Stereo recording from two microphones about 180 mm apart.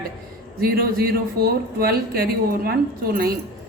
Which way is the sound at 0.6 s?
55° right (ahead or behind).